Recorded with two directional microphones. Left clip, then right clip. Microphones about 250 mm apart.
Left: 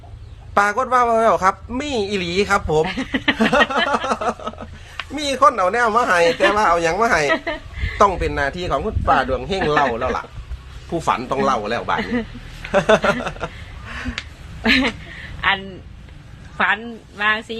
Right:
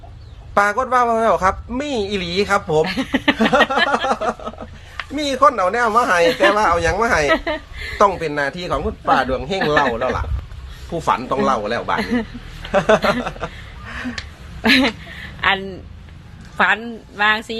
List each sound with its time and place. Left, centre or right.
0.5 s a man's voice: centre
2.8 s a woman's voice: right
3.3 s a man's voice: centre
7.3 s a sound: right
7.9 s a man's voice: centre
14.6 s a sound: right
16.6 s a woman's voice: right